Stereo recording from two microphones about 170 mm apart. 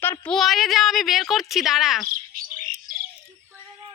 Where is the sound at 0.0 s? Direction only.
10° left (ahead or behind).